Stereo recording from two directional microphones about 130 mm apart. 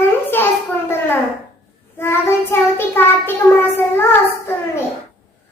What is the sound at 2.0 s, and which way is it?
A child's voice, 20° left (ahead or behind).